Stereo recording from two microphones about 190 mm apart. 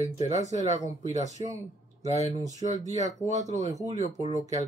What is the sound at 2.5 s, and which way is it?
Speech, 40° right (ahead or behind).